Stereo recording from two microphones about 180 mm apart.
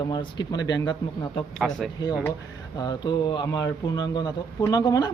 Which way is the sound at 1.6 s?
5° right (ahead or behind).